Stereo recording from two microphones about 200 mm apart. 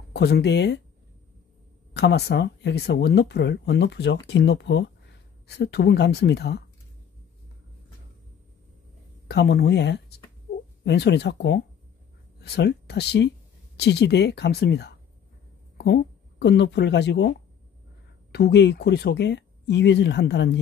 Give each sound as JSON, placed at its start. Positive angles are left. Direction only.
{"t": 0.1, "sound": "speech", "side_deg": 55}
{"t": 2.0, "sound": "speech", "side_deg": 55}
{"t": 9.3, "sound": "speech", "side_deg": 55}
{"t": 18.3, "sound": "speech", "side_deg": 55}